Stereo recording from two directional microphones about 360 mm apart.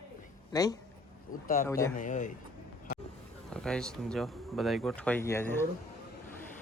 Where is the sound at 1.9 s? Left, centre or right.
Left.